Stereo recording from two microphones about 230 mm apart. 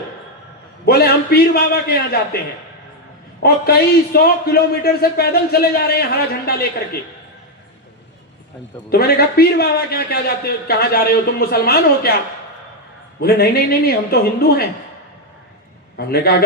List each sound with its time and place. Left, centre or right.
0.9 s a man's voice: left
8.9 s a man's voice: left
13.2 s a man's voice: left
16.0 s a man's voice: left